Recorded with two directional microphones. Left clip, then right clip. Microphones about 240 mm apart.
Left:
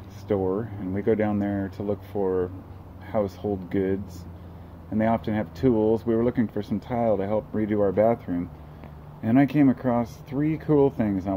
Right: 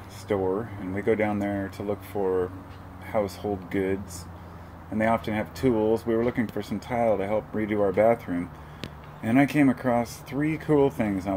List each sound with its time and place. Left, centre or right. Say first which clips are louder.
0.3 s speech: left 1 dB; centre